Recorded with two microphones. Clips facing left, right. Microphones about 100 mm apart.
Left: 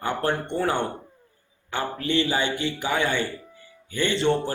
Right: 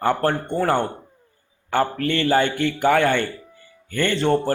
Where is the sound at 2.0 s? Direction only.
55° right (ahead or behind).